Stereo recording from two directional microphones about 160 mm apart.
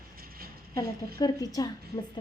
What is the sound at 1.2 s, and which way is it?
Speech, 25° left (ahead or behind).